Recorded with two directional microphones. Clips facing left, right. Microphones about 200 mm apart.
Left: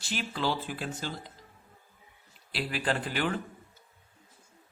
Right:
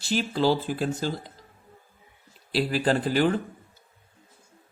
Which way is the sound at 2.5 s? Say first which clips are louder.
Right 8 dB; 35° right (ahead or behind).